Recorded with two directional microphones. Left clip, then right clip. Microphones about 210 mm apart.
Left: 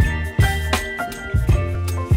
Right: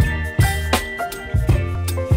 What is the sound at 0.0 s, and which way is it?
Music, centre (ahead or behind).